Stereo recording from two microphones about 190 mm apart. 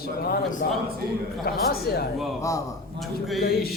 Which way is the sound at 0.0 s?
50° left (ahead or behind).